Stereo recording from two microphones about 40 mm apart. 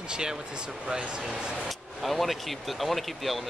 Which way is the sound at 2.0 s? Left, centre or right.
Centre.